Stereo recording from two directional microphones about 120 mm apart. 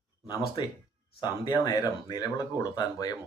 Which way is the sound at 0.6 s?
40° left (ahead or behind).